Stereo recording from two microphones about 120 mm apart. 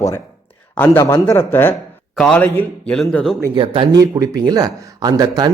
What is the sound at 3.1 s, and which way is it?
Speech, 5° left (ahead or behind).